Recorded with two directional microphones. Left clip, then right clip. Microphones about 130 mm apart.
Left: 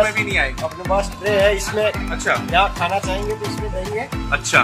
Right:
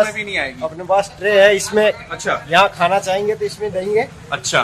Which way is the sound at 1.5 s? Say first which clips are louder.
Right 4 dB; 30° right (ahead or behind).